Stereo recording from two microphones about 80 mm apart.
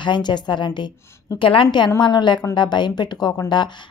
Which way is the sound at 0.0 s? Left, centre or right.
Left.